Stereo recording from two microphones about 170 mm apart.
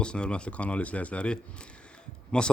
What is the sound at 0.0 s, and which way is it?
A man's voice, 5° left (ahead or behind).